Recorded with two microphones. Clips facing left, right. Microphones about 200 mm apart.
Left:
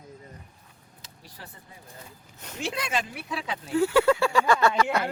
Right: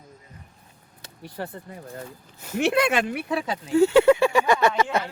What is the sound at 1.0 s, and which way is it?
Speech, 60° right (ahead or behind).